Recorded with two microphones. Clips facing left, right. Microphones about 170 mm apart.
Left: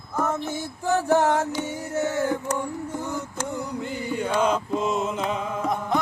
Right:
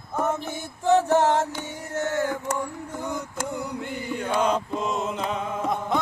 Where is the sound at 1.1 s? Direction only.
20° right (ahead or behind).